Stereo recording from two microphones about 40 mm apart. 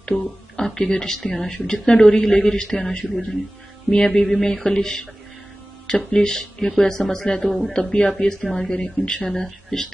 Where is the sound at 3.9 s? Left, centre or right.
Centre.